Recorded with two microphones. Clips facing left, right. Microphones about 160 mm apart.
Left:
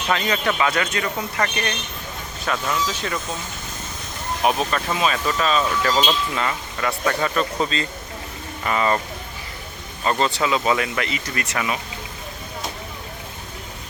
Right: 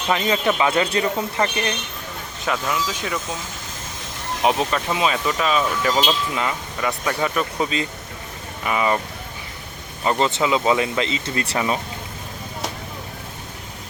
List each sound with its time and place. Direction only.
0.1 s speech: 20° right (ahead or behind)
2.4 s speech: 10° right (ahead or behind)
4.4 s speech: 20° right (ahead or behind)
10.0 s speech: 15° right (ahead or behind); by 11.8 s 35° right (ahead or behind)